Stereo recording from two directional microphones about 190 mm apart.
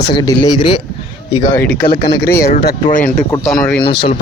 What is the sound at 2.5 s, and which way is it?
Speech, 45° left (ahead or behind).